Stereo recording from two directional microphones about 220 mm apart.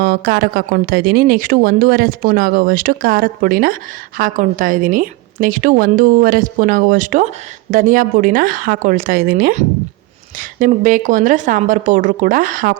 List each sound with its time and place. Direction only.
0.0 s speech: 45° right (ahead or behind)